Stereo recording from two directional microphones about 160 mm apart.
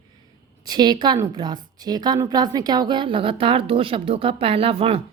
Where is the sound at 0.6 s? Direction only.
25° right (ahead or behind).